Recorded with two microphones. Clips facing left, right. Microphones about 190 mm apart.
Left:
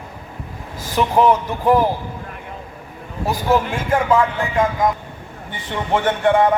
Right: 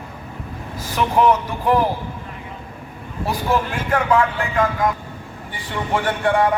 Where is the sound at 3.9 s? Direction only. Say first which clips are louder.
Left 1 dB; 20° left (ahead or behind).